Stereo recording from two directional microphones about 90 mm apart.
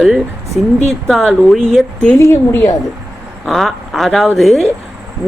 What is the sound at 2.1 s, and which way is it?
Speech, 30° left (ahead or behind).